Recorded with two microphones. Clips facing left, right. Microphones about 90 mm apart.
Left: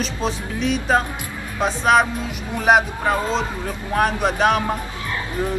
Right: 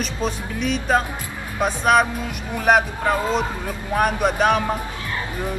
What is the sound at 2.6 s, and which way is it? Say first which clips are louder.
Speech: left 1 dB; 10° left (ahead or behind).